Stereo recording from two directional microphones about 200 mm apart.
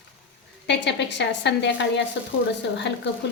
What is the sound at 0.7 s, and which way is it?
A woman's voice, 60° left (ahead or behind).